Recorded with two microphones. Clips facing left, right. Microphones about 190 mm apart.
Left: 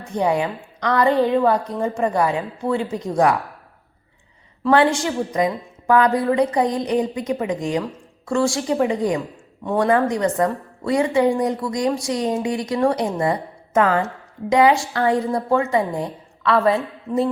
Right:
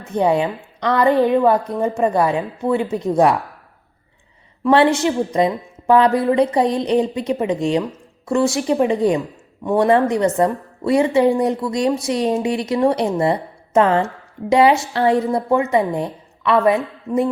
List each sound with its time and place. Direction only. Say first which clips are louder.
0.1 s a woman's voice: right 3 dB; 20° right (ahead or behind)
4.6 s a woman's voice: right 3 dB; 20° right (ahead or behind)